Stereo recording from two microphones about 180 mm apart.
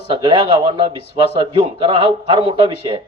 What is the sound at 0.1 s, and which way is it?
A man's voice, 30° right (ahead or behind).